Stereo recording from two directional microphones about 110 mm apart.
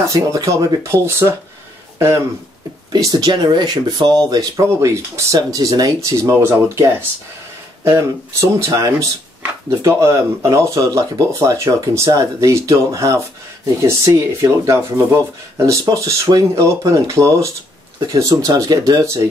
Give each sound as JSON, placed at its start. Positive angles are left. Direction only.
{"t": 0.1, "sound": "speech", "side_deg": -30}